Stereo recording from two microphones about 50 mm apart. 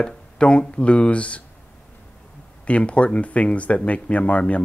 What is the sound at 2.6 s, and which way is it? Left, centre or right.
Speech, left.